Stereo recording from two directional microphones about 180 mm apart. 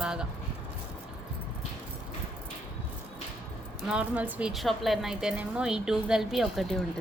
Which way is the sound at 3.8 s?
5° right (ahead or behind).